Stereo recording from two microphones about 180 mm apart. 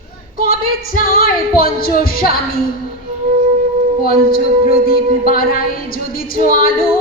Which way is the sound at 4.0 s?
55° left (ahead or behind).